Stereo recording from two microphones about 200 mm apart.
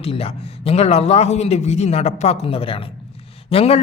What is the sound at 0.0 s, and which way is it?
A man's voice, 30° left (ahead or behind).